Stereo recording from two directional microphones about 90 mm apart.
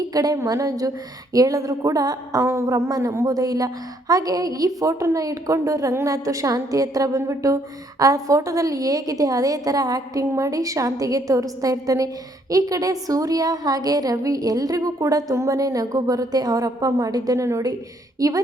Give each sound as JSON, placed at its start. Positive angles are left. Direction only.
{"t": 0.1, "sound": "a woman's voice", "side_deg": -45}